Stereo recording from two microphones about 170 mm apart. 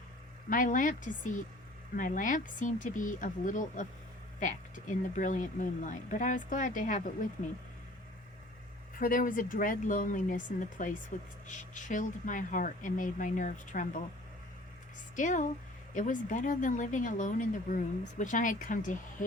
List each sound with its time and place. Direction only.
0.5 s speech: 50° left (ahead or behind)
9.0 s speech: 55° left (ahead or behind)
15.1 s speech: 50° left (ahead or behind)